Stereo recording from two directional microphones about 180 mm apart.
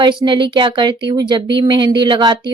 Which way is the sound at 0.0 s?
25° right (ahead or behind).